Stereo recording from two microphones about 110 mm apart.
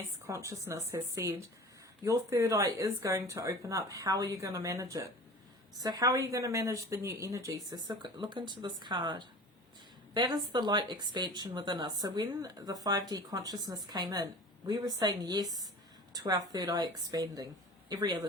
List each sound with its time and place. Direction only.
0.3 s a woman's voice: 30° right (ahead or behind)